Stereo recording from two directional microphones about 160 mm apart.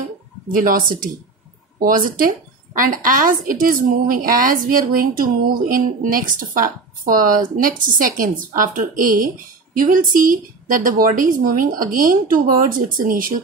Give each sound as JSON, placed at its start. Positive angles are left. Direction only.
{"t": 0.5, "sound": "speech", "side_deg": -60}